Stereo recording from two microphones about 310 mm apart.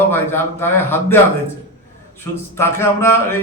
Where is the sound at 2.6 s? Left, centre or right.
Centre.